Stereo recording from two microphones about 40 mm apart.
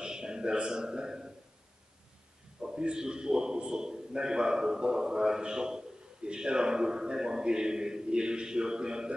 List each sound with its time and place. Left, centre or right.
0.0 s a man's voice: centre
2.6 s a man's voice: centre